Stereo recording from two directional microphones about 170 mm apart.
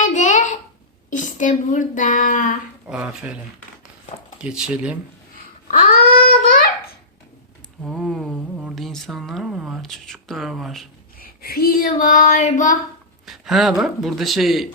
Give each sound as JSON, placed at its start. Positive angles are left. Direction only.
{"t": 0.0, "sound": "babbling", "side_deg": 45}
{"t": 1.1, "sound": "speech", "side_deg": 50}
{"t": 2.8, "sound": "speech", "side_deg": -5}
{"t": 4.4, "sound": "speech", "side_deg": -5}
{"t": 6.2, "sound": "child singing", "side_deg": 55}
{"t": 7.9, "sound": "speech", "side_deg": 0}
{"t": 11.2, "sound": "a sound", "side_deg": 60}
{"t": 13.2, "sound": "speech", "side_deg": 0}